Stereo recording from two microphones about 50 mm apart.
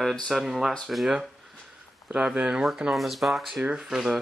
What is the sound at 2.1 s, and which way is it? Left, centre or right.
Speech, centre.